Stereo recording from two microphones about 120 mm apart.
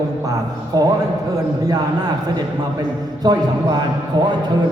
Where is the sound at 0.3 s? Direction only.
30° right (ahead or behind).